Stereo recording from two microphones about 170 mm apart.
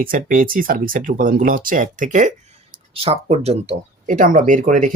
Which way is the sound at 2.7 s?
35° right (ahead or behind).